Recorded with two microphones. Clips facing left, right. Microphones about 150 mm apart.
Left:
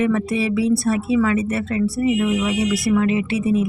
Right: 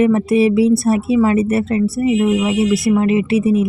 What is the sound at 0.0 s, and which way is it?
Speech, 25° right (ahead or behind).